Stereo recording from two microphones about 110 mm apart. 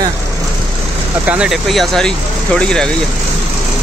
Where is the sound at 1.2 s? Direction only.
15° right (ahead or behind).